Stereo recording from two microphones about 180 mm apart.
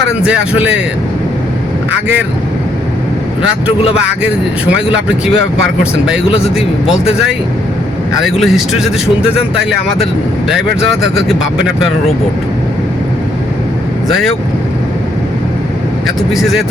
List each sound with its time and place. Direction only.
0.3 s speech: 10° right (ahead or behind)
8.2 s speech: centre (ahead or behind)
16.3 s speech: centre (ahead or behind)